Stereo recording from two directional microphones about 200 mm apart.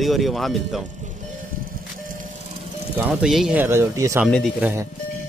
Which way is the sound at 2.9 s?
5° right (ahead or behind).